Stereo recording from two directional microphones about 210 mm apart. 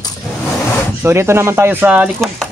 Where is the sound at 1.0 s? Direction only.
10° right (ahead or behind).